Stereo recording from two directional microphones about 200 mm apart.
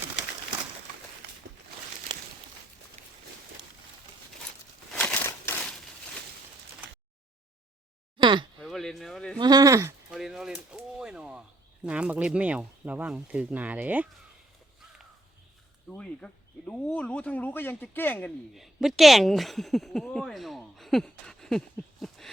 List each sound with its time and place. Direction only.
3.0 s a sound: 35° right (ahead or behind)
4.9 s crumpling: 5° left (ahead or behind)
8.2 s a sound: 25° right (ahead or behind)
8.6 s speech: centre (ahead or behind)
9.4 s speech: 20° right (ahead or behind)
10.1 s speech: centre (ahead or behind)
15.9 s a man's voice: 5° left (ahead or behind)
18.5 s speech: centre (ahead or behind)